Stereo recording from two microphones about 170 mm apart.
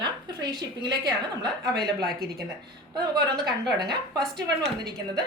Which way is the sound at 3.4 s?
25° right (ahead or behind).